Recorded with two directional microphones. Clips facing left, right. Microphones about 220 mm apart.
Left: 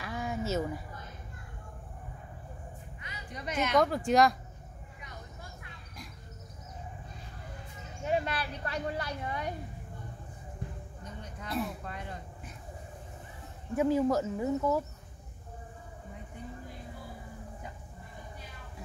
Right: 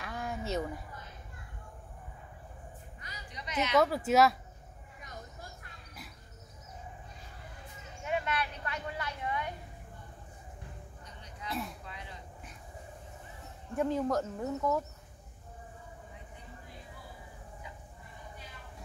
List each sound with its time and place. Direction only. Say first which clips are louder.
0.0 s a sound: left 3 dB; centre (ahead or behind)
3.3 s a woman's voice: left 2 dB; 50° left (ahead or behind)
3.7 s speech: even; 5° right (ahead or behind)
8.0 s speech: left 2 dB; 35° left (ahead or behind)
11.6 s speech: left 6 dB; 50° left (ahead or behind)
13.7 s speech: left 4 dB; 5° left (ahead or behind)